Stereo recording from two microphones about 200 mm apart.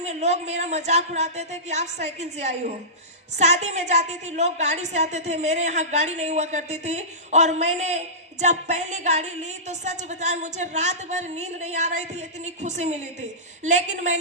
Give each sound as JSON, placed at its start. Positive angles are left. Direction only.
{"t": 0.0, "sound": "a woman's voice", "side_deg": -35}